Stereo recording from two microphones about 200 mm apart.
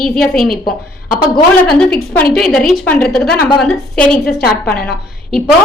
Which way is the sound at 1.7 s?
5° left (ahead or behind).